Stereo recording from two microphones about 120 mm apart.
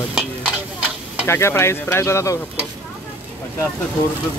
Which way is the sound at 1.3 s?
20° left (ahead or behind).